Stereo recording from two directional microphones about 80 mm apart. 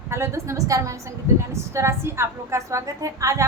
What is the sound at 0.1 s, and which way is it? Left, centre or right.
A woman's voice, right.